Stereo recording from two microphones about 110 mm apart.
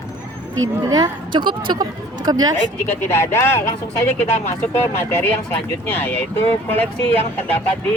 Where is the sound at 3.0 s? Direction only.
20° left (ahead or behind).